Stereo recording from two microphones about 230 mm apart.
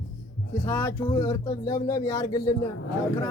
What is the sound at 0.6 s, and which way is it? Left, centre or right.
Speech, centre.